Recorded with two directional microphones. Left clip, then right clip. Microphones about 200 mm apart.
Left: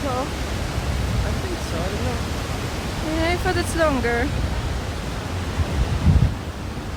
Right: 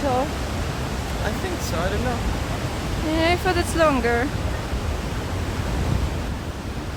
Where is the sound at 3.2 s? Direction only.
10° right (ahead or behind).